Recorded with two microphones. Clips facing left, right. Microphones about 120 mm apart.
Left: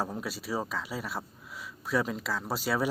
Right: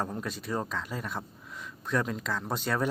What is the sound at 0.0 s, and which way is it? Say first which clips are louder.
Speech: even; 5° left (ahead or behind).